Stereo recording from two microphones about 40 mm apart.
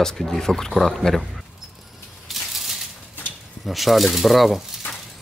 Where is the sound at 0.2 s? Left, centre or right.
Centre.